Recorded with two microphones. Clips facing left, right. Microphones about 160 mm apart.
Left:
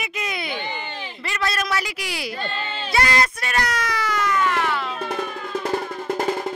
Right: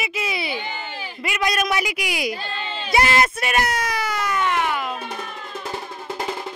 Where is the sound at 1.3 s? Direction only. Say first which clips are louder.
Right 2 dB; 15° right (ahead or behind).